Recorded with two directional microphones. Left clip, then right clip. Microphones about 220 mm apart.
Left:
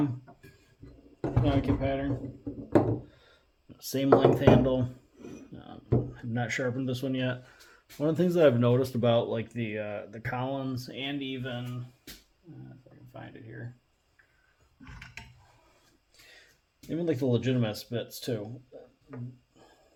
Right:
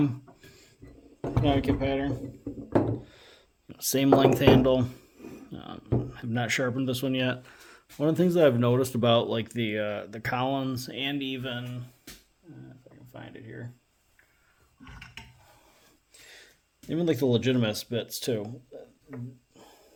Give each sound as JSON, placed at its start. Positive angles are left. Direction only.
{"t": 1.4, "sound": "speech", "side_deg": -60}
{"t": 7.9, "sound": "speech", "side_deg": -30}
{"t": 13.1, "sound": "speech", "side_deg": -60}
{"t": 16.9, "sound": "speech", "side_deg": -55}
{"t": 19.6, "sound": "a sound", "side_deg": -60}